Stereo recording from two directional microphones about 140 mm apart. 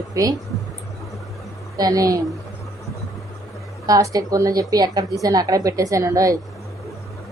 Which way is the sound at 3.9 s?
25° right (ahead or behind).